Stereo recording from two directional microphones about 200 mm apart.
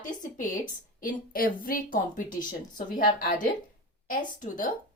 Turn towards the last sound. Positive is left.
turn(degrees=45)  # may be behind; listen again after turning